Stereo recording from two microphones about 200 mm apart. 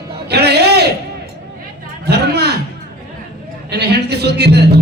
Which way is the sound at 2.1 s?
55° right (ahead or behind).